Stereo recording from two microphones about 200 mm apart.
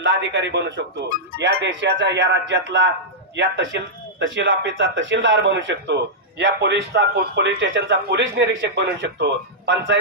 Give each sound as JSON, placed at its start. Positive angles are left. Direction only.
{"t": 0.0, "sound": "a man's voice", "side_deg": -65}